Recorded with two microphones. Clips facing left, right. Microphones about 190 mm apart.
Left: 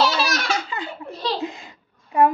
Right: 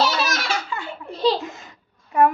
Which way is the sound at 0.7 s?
20° left (ahead or behind).